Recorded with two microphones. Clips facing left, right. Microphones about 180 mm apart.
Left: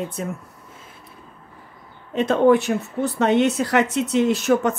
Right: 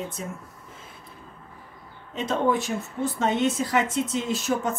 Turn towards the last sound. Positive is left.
turn(degrees=65)  # may be behind; listen again after turning